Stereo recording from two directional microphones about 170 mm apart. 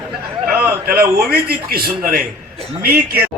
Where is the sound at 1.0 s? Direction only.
65° right (ahead or behind).